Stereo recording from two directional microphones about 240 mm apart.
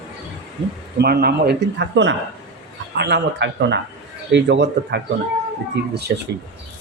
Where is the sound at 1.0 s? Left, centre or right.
Right.